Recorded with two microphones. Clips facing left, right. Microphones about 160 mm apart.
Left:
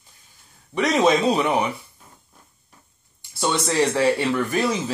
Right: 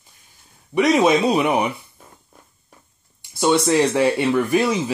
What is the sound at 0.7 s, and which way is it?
Speech, 10° right (ahead or behind).